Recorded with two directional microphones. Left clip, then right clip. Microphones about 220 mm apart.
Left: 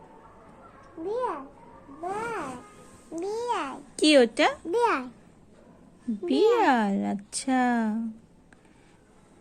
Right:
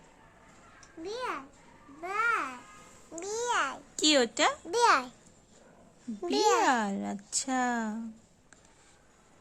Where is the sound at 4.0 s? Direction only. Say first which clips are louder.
Left 6 dB; centre (ahead or behind).